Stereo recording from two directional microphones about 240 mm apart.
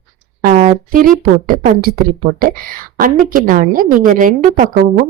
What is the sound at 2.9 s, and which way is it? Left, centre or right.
A woman's voice, right.